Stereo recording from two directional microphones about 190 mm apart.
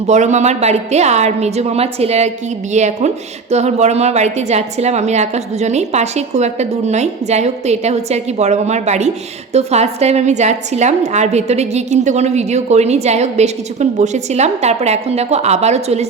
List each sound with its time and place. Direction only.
0.1 s a woman's voice: 40° right (ahead or behind)